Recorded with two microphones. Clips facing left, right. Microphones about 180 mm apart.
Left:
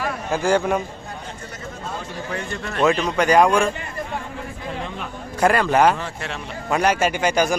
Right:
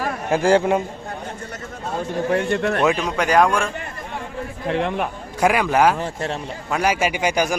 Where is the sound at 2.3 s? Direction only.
65° right (ahead or behind).